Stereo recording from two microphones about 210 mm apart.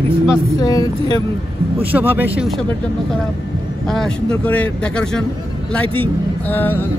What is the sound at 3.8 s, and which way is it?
Speech, 5° left (ahead or behind).